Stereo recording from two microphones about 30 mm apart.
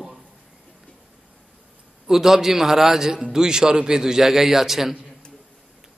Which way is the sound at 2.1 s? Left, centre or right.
Centre.